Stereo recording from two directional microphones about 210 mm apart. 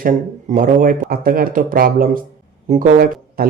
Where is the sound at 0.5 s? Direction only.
40° right (ahead or behind).